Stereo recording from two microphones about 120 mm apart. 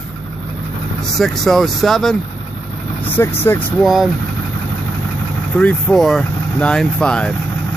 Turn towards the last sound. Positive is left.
turn(degrees=10)  # may be behind; listen again after turning